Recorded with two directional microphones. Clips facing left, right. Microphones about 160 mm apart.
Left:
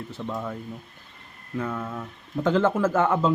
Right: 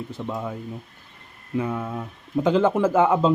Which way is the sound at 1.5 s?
15° right (ahead or behind).